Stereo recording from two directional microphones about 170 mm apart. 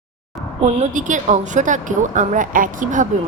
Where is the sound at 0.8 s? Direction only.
50° right (ahead or behind).